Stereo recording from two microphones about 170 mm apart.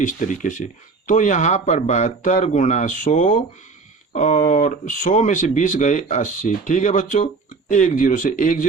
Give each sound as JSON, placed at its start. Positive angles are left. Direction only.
{"t": 0.0, "sound": "speech", "side_deg": 50}